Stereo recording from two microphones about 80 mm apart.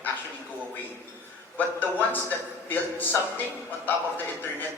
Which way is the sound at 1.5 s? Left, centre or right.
Left.